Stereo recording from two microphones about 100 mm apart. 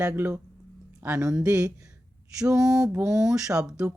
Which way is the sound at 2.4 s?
5° right (ahead or behind).